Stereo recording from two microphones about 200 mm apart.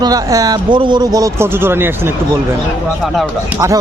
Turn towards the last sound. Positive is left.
turn(degrees=-15)  # may be behind; listen again after turning